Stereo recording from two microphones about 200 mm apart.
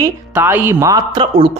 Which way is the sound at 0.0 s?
10° right (ahead or behind).